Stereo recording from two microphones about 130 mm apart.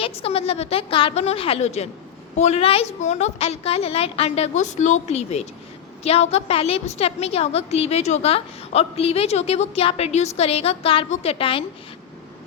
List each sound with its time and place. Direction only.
0.0 s a woman's voice: 50° left (ahead or behind)